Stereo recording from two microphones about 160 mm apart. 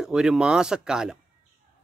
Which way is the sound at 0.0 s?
5° right (ahead or behind).